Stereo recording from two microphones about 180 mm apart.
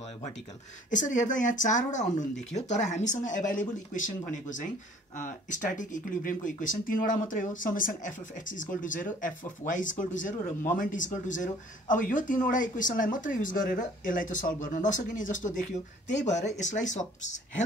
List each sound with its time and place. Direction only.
0.8 s speech: 45° left (ahead or behind)